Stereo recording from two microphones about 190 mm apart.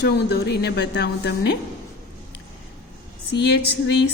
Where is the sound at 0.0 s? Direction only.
60° left (ahead or behind).